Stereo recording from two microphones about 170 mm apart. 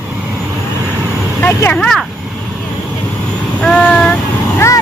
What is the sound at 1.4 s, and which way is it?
Speech, 10° left (ahead or behind).